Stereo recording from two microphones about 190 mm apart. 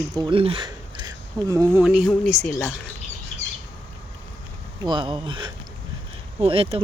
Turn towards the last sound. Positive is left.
turn(degrees=-30)  # may be behind; listen again after turning